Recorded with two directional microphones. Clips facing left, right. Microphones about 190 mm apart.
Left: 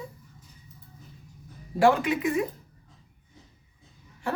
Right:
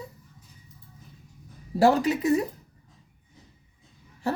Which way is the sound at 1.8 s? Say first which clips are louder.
Right 1 dB; 40° right (ahead or behind).